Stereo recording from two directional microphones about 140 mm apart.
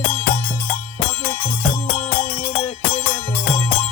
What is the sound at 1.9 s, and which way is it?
Music, 15° left (ahead or behind).